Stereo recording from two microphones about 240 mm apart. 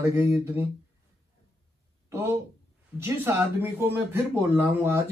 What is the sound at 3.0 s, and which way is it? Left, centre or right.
Speech, centre.